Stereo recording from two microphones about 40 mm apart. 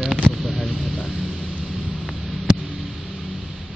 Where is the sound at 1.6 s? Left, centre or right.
Centre.